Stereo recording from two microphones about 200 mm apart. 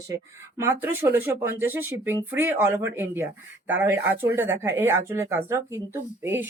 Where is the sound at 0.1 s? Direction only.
15° right (ahead or behind).